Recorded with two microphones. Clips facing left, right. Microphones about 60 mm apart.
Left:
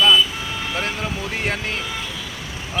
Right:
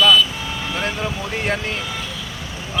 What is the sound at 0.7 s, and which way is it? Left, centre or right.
Speech, centre.